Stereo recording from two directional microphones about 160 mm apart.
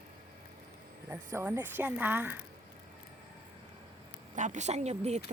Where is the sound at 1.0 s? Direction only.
15° right (ahead or behind).